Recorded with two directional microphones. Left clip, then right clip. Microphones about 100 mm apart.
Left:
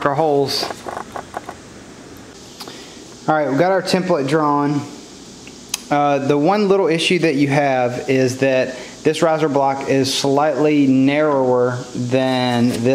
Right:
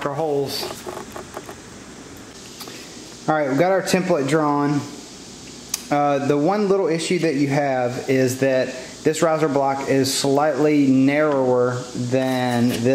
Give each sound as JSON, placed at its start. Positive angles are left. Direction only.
{"t": 0.1, "sound": "speech", "side_deg": 50}
{"t": 3.3, "sound": "speech", "side_deg": 0}
{"t": 8.2, "sound": "speech", "side_deg": 5}
{"t": 9.1, "sound": "speech", "side_deg": 0}